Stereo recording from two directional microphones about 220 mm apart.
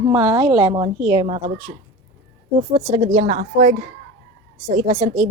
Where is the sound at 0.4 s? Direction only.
25° right (ahead or behind).